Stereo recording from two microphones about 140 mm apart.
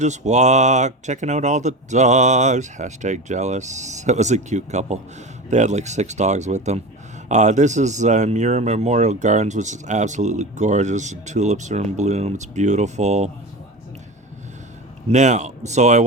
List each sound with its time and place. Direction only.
0.0 s speech: 55° right (ahead or behind)
15.1 s speech: 55° right (ahead or behind)